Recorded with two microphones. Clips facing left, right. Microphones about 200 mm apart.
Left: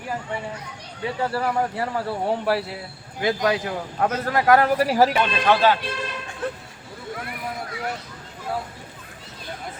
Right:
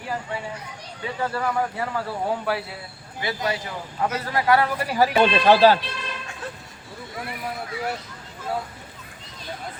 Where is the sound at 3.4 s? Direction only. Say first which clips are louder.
Left 5 dB; 60° left (ahead or behind); by 5.1 s 45° left (ahead or behind).